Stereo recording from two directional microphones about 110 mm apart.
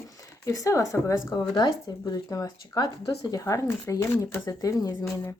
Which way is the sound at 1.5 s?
40° left (ahead or behind).